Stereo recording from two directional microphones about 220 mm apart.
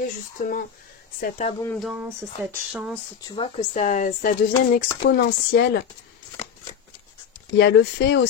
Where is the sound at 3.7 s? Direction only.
35° left (ahead or behind).